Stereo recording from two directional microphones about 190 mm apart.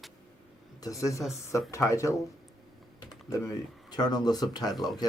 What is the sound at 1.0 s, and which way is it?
Speech, 15° left (ahead or behind).